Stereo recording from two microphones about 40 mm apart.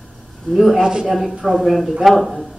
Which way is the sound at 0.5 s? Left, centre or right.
Centre.